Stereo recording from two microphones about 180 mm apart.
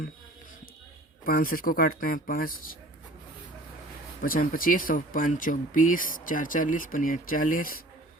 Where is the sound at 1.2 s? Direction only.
55° left (ahead or behind).